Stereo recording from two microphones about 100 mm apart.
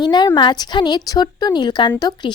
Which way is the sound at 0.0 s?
45° left (ahead or behind).